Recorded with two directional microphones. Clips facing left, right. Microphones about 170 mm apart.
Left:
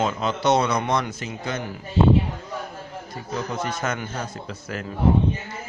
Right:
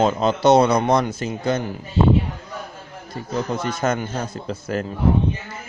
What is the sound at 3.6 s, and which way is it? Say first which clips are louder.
Speech: right 5 dB; 35° right (ahead or behind).